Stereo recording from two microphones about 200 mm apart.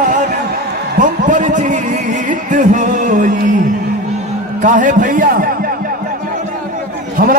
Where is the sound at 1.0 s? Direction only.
40° right (ahead or behind).